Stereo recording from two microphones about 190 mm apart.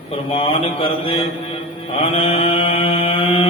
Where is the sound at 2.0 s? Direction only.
30° left (ahead or behind).